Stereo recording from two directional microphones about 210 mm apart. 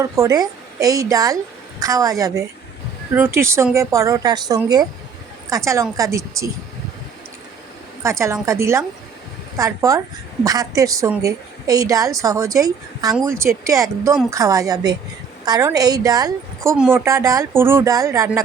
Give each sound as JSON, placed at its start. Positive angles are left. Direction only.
{"t": 0.0, "sound": "a woman's voice", "side_deg": -15}
{"t": 8.0, "sound": "a woman's voice", "side_deg": -15}
{"t": 16.7, "sound": "a woman's voice", "side_deg": -5}